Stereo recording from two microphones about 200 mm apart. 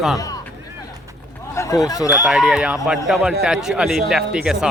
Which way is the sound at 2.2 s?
Centre (ahead or behind).